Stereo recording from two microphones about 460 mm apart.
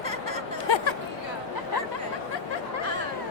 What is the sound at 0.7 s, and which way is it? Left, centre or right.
Chatter, left.